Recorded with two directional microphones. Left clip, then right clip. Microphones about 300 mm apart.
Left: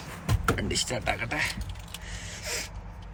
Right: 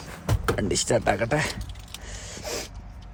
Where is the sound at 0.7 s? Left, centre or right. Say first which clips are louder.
Right 6 dB; right.